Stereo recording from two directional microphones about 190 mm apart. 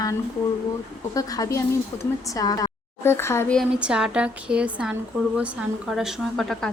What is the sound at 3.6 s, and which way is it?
Speech, 5° right (ahead or behind).